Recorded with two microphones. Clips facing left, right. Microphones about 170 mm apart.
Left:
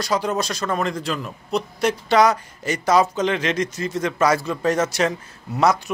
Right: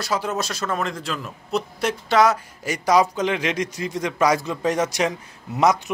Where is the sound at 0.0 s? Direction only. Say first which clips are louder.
Left 3 dB; 5° right (ahead or behind).